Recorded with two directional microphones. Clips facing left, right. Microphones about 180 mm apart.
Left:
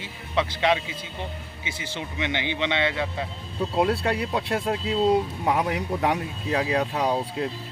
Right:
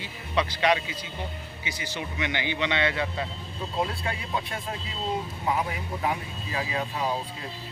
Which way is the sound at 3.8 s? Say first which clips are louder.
Left 7 dB; 70° left (ahead or behind).